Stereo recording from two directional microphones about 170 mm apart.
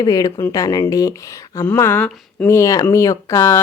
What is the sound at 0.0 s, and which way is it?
A woman's voice, 20° left (ahead or behind).